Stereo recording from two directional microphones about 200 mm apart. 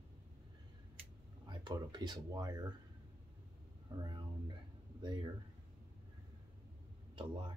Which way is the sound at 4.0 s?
25° right (ahead or behind).